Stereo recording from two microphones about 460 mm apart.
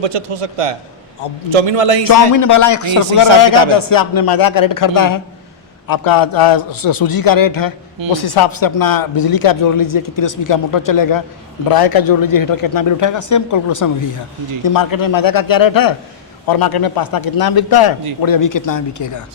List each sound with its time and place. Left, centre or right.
0.2 s a man's voice: right
2.0 s speech: left